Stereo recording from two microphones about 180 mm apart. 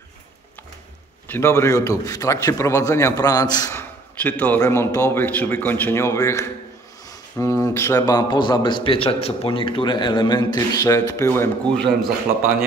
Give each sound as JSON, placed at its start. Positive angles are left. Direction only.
{"t": 1.3, "sound": "a man's voice", "side_deg": 15}